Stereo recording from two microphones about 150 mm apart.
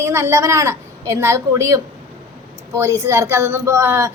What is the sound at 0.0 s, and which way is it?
A woman's voice, 15° right (ahead or behind).